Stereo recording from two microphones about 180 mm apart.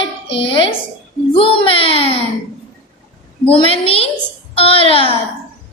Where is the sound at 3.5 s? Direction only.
30° left (ahead or behind).